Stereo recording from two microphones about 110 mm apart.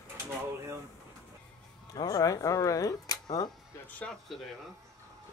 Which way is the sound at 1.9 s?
35° left (ahead or behind).